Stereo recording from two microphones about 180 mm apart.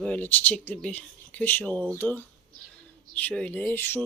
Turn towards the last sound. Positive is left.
turn(degrees=10)  # may be behind; listen again after turning